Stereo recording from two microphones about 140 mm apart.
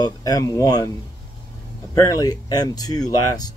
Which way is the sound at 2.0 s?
25° left (ahead or behind).